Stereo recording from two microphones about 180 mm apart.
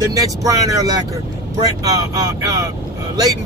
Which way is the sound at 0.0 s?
20° right (ahead or behind).